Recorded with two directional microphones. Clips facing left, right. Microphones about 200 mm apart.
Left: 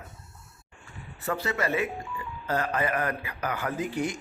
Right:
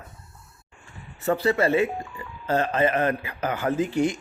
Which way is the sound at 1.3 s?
30° right (ahead or behind).